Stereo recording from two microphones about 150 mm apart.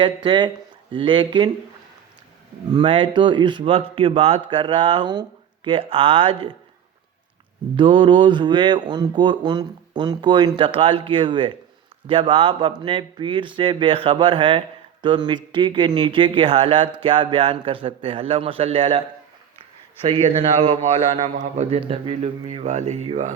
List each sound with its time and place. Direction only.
0.0 s speech: 30° right (ahead or behind)
2.6 s speech: 30° right (ahead or behind)
7.8 s speech: 35° right (ahead or behind)
20.7 s speech: 35° right (ahead or behind)
21.3 s speech: 50° right (ahead or behind)